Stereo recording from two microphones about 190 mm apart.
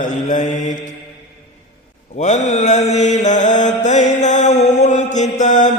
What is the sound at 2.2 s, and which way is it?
Mantra, 35° left (ahead or behind).